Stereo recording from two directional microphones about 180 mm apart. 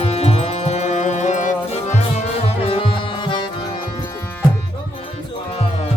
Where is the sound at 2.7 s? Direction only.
30° left (ahead or behind).